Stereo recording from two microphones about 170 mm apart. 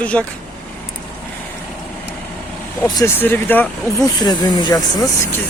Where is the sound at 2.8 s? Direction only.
20° left (ahead or behind).